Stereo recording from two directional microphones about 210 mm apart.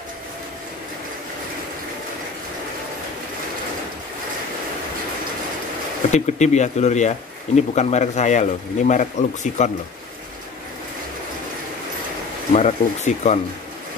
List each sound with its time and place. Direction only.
6.1 s speech: 35° left (ahead or behind)
12.5 s speech: 35° left (ahead or behind)